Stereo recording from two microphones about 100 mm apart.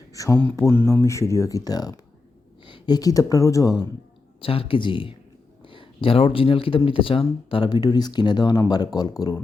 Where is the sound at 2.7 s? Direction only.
50° left (ahead or behind).